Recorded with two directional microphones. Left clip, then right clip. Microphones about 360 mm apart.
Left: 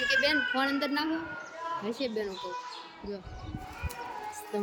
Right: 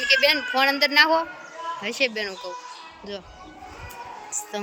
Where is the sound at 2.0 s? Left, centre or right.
Centre.